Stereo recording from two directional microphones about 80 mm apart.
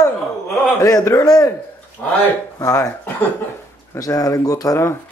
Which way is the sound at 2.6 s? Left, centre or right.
Left.